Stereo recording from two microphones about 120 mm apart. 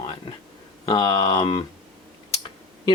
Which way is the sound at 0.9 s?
40° left (ahead or behind).